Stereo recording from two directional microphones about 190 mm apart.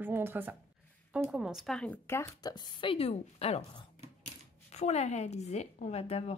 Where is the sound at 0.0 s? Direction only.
10° right (ahead or behind).